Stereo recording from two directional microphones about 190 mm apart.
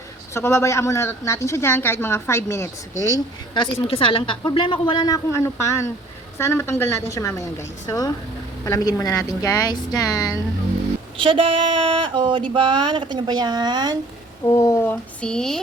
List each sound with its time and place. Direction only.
0.3 s a woman's voice: 15° left (ahead or behind)
11.2 s speech: 30° right (ahead or behind)
14.5 s speech: 10° left (ahead or behind)